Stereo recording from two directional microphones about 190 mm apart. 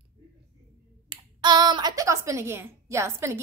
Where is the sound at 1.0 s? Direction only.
25° right (ahead or behind).